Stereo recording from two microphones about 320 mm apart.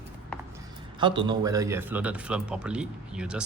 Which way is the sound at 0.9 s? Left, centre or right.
Centre.